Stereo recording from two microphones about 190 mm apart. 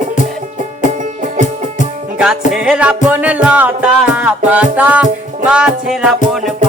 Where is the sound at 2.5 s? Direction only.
5° right (ahead or behind).